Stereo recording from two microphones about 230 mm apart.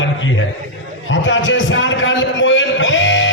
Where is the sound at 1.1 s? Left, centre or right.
Left.